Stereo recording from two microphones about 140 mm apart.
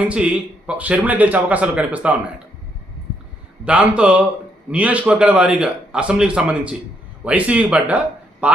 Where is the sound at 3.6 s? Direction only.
10° right (ahead or behind).